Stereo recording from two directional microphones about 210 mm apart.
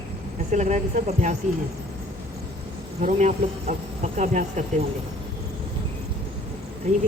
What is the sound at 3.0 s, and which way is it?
Speech, 35° right (ahead or behind).